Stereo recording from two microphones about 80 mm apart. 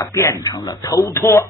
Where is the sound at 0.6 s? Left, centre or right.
Left.